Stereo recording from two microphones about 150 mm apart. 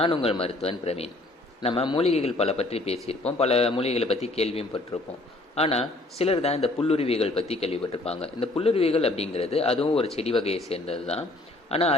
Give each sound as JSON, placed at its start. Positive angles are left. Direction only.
{"t": 0.0, "sound": "a man's voice", "side_deg": 40}